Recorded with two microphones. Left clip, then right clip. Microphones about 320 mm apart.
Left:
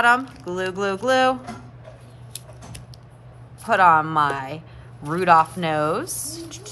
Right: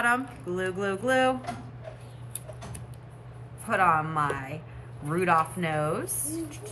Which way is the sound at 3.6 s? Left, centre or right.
Centre.